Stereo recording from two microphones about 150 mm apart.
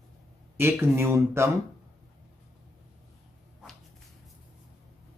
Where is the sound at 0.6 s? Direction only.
15° right (ahead or behind).